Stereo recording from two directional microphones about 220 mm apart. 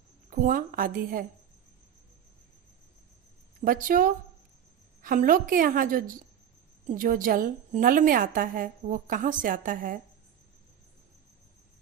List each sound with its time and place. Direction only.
0.3 s a woman's voice: 40° right (ahead or behind)
3.6 s a woman's voice: 40° right (ahead or behind)